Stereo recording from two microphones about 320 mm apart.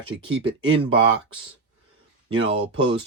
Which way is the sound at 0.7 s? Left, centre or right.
Centre.